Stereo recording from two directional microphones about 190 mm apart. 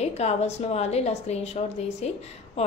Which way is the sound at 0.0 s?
35° left (ahead or behind).